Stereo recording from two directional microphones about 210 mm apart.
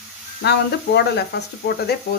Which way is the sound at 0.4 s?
55° left (ahead or behind).